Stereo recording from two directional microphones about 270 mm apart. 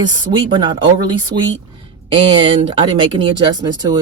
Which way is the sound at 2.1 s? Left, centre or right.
Centre.